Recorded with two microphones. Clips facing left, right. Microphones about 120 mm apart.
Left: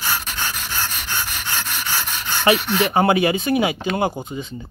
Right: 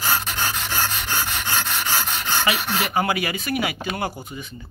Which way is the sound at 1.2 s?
60° right (ahead or behind).